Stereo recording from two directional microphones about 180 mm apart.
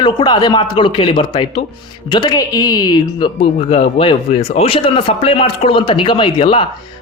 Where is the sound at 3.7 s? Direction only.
35° left (ahead or behind).